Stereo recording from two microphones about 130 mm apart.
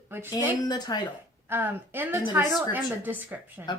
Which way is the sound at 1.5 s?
15° right (ahead or behind).